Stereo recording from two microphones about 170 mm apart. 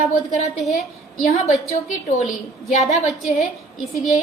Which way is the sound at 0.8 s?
40° left (ahead or behind).